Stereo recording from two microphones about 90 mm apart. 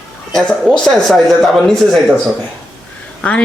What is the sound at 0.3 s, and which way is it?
Speech, 5° left (ahead or behind).